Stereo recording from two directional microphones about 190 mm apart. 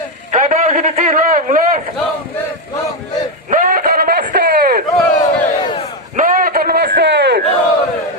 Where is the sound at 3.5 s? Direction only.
45° right (ahead or behind).